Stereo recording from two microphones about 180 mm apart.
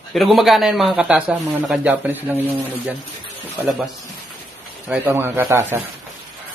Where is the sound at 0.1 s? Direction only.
Centre (ahead or behind).